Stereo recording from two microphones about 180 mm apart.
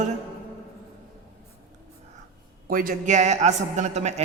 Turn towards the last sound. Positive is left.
turn(degrees=-40)  # may be behind; listen again after turning